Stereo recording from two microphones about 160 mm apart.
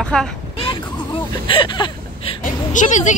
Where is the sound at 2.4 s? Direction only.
50° left (ahead or behind).